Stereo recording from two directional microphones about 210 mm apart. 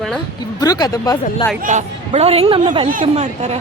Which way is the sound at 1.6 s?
35° right (ahead or behind).